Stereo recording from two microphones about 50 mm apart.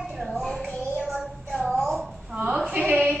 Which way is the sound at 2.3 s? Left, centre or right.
Right.